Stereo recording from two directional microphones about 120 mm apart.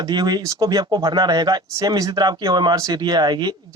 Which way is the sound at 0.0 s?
35° right (ahead or behind).